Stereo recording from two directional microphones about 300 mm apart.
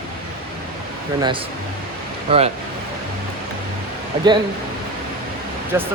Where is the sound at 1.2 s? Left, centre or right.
Centre.